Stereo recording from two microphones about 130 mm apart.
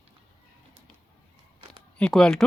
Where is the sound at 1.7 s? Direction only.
5° left (ahead or behind).